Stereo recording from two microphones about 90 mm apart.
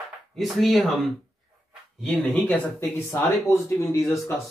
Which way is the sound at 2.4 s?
20° left (ahead or behind).